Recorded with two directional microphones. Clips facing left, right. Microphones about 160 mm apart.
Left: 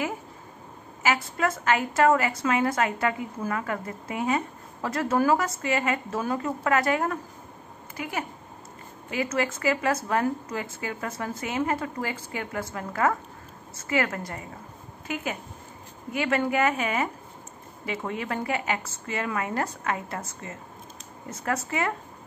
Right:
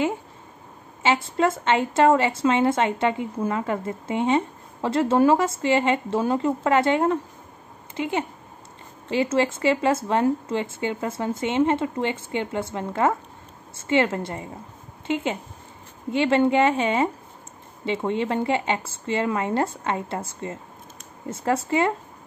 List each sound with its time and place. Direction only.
1.0 s a woman's voice: 25° right (ahead or behind)